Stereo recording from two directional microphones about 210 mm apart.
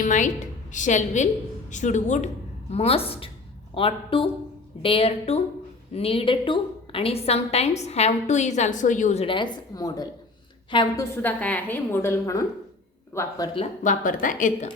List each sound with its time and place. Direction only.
0.0 s a woman's voice: 35° left (ahead or behind); by 13.7 s 20° left (ahead or behind)
13.8 s a woman's voice: 40° left (ahead or behind)